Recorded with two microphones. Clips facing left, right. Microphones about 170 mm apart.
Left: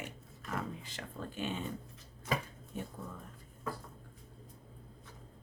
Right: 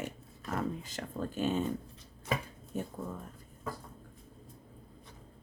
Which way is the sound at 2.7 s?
45° right (ahead or behind).